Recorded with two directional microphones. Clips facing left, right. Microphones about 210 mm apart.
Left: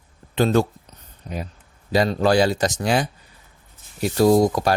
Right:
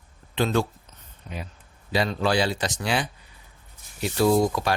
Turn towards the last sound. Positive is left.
turn(degrees=40)  # may be behind; listen again after turning